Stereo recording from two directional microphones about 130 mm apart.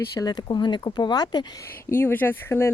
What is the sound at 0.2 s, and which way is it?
Speech, 35° left (ahead or behind).